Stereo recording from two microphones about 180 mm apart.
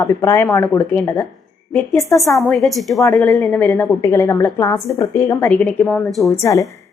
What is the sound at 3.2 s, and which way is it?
A woman's voice, 5° left (ahead or behind).